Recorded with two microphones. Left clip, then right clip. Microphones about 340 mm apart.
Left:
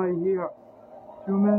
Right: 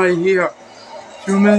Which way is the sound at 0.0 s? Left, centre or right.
Left.